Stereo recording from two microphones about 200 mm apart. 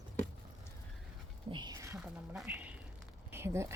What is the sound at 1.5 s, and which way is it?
Speech, 20° right (ahead or behind).